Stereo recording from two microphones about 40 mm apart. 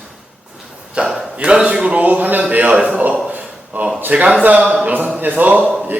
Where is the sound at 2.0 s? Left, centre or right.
Right.